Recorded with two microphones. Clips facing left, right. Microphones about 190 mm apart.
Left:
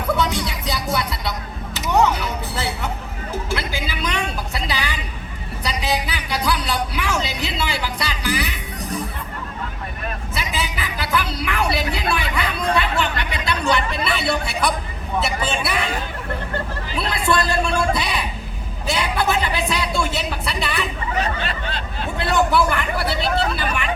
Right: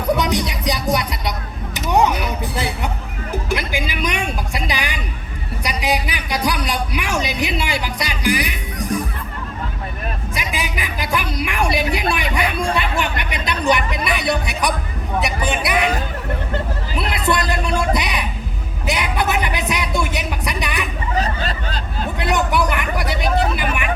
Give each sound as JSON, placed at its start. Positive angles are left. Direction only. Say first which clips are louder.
{"t": 0.1, "sound": "music", "louder": "right 3 dB", "side_deg": -15}
{"t": 1.7, "sound": "vehicle", "louder": "right 1 dB", "side_deg": -15}
{"t": 3.3, "sound": "a sound", "louder": "right 3 dB", "side_deg": -15}
{"t": 10.3, "sound": "a sound", "louder": "right 1 dB", "side_deg": -15}
{"t": 17.0, "sound": "music", "louder": "even", "side_deg": -20}
{"t": 21.2, "sound": "snicker", "louder": "right 2 dB", "side_deg": -40}
{"t": 22.2, "sound": "vehicle", "louder": "left 1 dB", "side_deg": -20}